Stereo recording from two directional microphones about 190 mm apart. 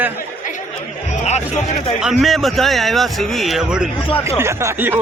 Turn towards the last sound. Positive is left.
turn(degrees=-10)  # may be behind; listen again after turning